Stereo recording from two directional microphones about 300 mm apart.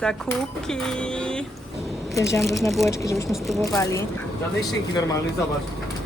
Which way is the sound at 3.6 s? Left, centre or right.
Centre.